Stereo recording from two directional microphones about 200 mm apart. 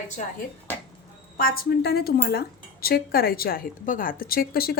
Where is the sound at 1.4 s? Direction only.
45° left (ahead or behind).